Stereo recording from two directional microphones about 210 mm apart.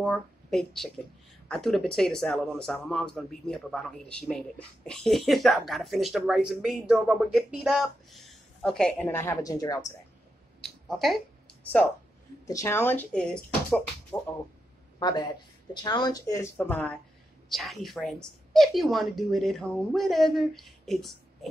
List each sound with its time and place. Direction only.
0.0 s a man's voice: 5° left (ahead or behind)
10.6 s speech: centre (ahead or behind)
12.4 s speech: 15° left (ahead or behind)
15.0 s a man's voice: 20° left (ahead or behind); by 21.5 s centre (ahead or behind)